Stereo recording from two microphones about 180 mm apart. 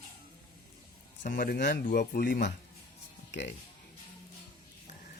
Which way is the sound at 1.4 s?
55° left (ahead or behind).